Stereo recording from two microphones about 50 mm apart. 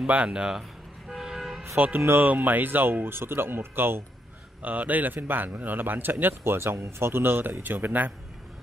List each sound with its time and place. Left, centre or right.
0.0 s speech: right
1.1 s vehicle: centre
2.0 s speech: right
2.2 s speech: right
4.6 s a man's voice: right